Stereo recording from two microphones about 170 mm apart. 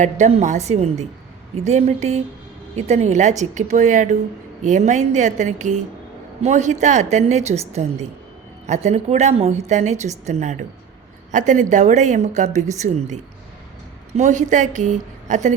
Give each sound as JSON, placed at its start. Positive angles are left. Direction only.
{"t": 0.0, "sound": "a woman's voice", "side_deg": -40}
{"t": 14.2, "sound": "a woman's voice", "side_deg": -45}